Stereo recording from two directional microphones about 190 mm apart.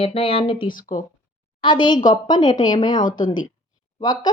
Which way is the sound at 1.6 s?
25° left (ahead or behind).